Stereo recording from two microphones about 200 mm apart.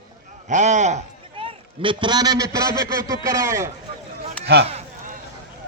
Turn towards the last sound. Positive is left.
turn(degrees=-30)  # may be behind; listen again after turning